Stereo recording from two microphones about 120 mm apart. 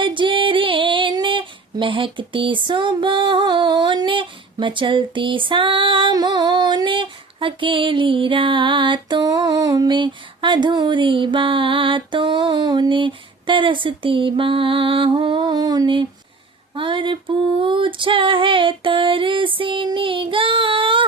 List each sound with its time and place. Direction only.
0.0 s female singing: 45° right (ahead or behind)